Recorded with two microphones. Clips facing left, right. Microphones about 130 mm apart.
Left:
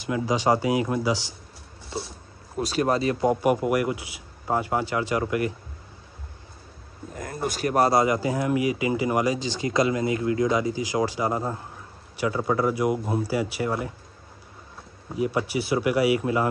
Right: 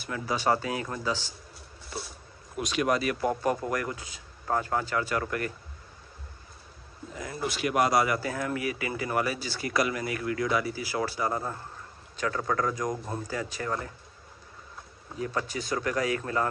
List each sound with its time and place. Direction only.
0.0 s a man's voice: 15° left (ahead or behind)
1.9 s a sound: 25° left (ahead or behind)
2.5 s a man's voice: 35° left (ahead or behind); by 5.5 s 15° left (ahead or behind)
7.4 s a man's voice: 40° left (ahead or behind); by 13.9 s 15° left (ahead or behind)
15.1 s a man's voice: 15° left (ahead or behind)